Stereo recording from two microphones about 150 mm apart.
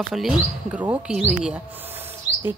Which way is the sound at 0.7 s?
15° right (ahead or behind).